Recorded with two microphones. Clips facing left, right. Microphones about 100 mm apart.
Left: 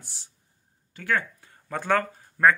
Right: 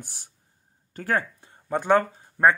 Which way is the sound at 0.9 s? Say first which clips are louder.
Right 1 dB; 40° right (ahead or behind).